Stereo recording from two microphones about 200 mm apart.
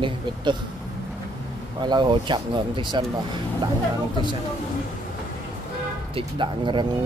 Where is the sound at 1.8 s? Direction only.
20° right (ahead or behind).